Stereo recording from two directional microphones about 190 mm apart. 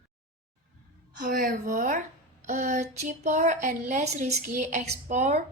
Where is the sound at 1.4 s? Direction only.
45° right (ahead or behind).